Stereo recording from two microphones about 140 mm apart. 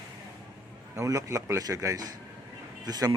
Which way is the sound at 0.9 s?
25° right (ahead or behind).